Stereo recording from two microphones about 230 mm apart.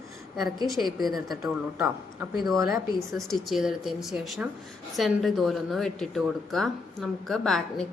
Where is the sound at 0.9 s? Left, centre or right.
Left.